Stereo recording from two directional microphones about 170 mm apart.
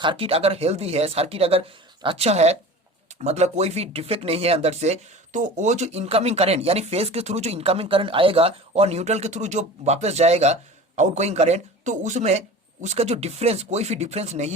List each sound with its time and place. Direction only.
0.0 s speech: 30° right (ahead or behind)